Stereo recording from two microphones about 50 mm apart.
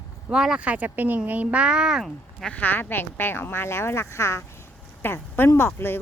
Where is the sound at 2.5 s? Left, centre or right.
Left.